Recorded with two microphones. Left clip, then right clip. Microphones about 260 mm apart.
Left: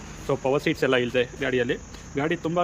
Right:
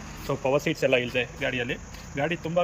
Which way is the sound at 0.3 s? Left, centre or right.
Centre.